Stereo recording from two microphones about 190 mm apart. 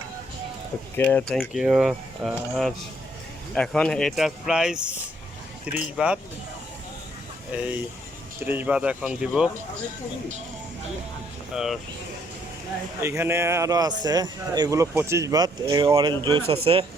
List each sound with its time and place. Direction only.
0.9 s speech: 10° left (ahead or behind)
7.5 s speech: 5° right (ahead or behind)
11.5 s speech: centre (ahead or behind)
13.0 s speech: 15° right (ahead or behind); by 16.8 s 30° right (ahead or behind)